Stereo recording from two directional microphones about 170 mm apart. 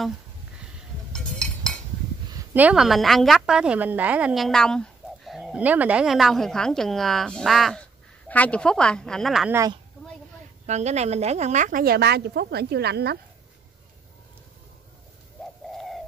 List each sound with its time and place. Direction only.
1.1 s a sound: 5° left (ahead or behind)
2.3 s a woman's voice: 10° right (ahead or behind)
10.7 s a woman's voice: 40° right (ahead or behind); by 13.2 s 70° right (ahead or behind)
15.7 s bird: centre (ahead or behind)